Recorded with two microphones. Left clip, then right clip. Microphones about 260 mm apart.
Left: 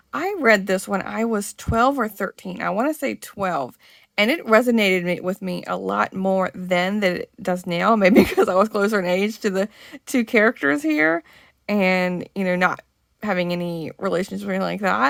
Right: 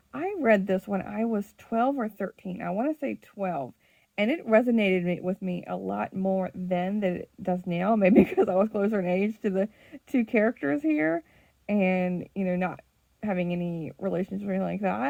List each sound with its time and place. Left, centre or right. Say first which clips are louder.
0.1 s speech: left 6 dB; centre